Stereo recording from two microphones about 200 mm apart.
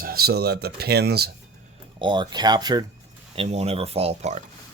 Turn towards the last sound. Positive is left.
turn(degrees=-35)  # may be behind; listen again after turning